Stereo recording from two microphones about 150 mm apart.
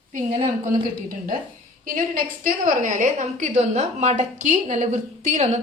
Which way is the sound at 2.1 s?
65° right (ahead or behind).